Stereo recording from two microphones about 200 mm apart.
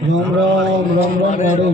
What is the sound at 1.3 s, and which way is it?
Speech, 35° left (ahead or behind).